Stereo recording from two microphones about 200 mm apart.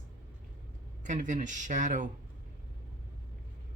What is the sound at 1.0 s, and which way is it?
Speech, 40° right (ahead or behind).